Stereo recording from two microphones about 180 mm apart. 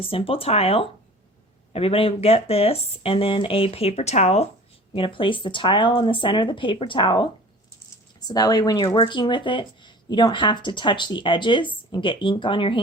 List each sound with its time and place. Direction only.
0.0 s speech: 30° left (ahead or behind)
8.3 s speech: 20° left (ahead or behind)